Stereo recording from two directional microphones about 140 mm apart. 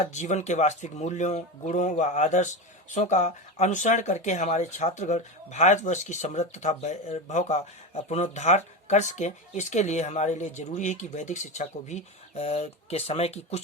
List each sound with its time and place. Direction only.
0.0 s speech: 55° left (ahead or behind)